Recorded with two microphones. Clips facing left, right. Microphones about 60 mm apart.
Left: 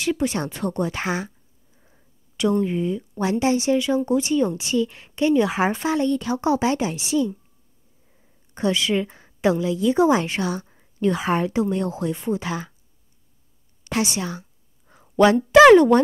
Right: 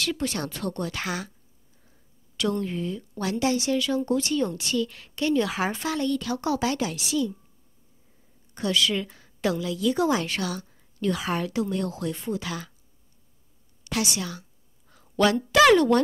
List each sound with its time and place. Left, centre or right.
0.0 s a woman's voice: left
8.5 s a woman's voice: left
13.8 s a woman's voice: left
14.9 s a sound: left